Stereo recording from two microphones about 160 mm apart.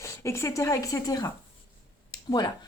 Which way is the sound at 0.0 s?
15° left (ahead or behind).